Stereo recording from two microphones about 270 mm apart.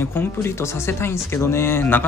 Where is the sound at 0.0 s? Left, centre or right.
Centre.